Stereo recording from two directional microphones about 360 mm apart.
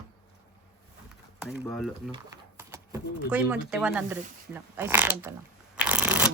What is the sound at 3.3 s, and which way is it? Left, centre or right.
Speech, centre.